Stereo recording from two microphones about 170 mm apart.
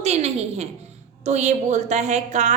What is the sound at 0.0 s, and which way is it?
A woman's voice, 40° right (ahead or behind).